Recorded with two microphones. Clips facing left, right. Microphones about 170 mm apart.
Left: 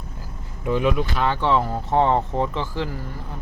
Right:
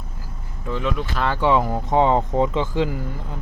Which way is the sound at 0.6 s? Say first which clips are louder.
Left 4 dB; 15° left (ahead or behind).